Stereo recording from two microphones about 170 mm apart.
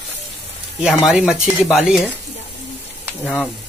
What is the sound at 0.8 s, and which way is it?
A man's voice, 5° right (ahead or behind).